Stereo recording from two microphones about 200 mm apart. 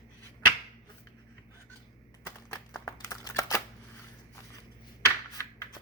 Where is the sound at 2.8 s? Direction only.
15° left (ahead or behind).